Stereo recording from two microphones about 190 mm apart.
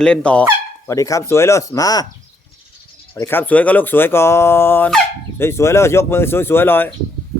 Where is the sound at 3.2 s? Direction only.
10° left (ahead or behind).